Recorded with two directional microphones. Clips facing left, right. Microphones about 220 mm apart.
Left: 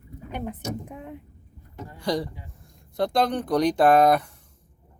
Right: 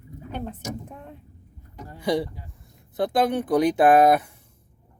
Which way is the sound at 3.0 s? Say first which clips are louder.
Right 1 dB; 5° right (ahead or behind).